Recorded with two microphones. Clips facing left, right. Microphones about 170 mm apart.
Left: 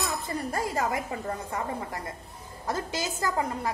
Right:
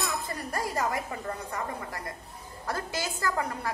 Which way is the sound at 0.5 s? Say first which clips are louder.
Left 1 dB; 20° left (ahead or behind).